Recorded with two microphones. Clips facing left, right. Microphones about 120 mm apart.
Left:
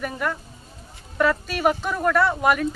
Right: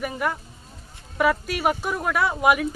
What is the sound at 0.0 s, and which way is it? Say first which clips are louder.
Speech: right 1 dB; 5° right (ahead or behind).